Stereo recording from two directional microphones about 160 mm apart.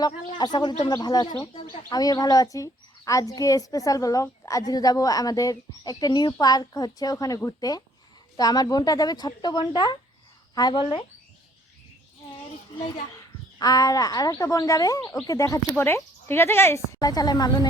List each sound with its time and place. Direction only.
0.0 s a woman's voice: 25° left (ahead or behind)
13.6 s a woman's voice: 25° left (ahead or behind)